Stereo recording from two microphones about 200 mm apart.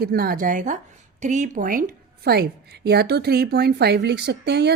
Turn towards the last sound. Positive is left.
turn(degrees=-55)  # may be behind; listen again after turning